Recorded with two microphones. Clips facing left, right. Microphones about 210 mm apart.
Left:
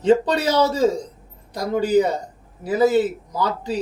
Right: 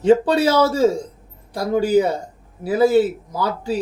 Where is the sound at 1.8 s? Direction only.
10° right (ahead or behind).